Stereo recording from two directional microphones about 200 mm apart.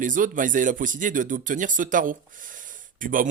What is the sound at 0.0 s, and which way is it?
Speech, 40° right (ahead or behind).